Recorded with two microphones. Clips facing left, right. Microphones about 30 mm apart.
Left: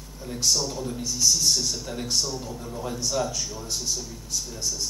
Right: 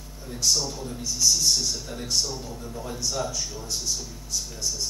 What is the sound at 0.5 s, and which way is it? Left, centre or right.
A man's voice, centre.